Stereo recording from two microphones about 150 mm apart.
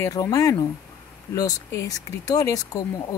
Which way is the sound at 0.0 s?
25° left (ahead or behind).